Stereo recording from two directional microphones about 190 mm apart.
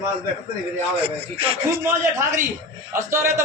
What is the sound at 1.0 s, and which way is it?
Speech, 30° right (ahead or behind).